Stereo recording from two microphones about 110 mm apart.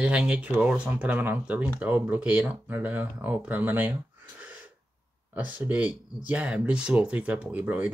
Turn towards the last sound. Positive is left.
turn(degrees=-15)  # may be behind; listen again after turning